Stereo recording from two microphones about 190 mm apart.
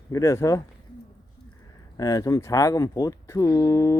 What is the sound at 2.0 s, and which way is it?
Speech, 20° left (ahead or behind).